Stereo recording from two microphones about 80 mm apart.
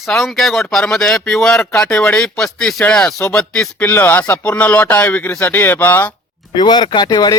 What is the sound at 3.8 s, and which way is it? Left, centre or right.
Speech, left.